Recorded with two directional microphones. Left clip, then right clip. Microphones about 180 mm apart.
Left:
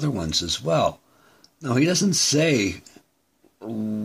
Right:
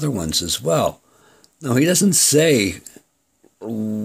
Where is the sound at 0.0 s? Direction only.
30° right (ahead or behind).